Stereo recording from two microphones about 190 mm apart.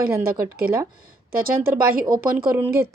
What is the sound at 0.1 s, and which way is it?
Speech, 15° right (ahead or behind).